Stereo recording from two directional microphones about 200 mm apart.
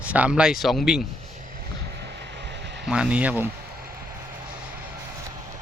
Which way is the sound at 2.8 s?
5° right (ahead or behind).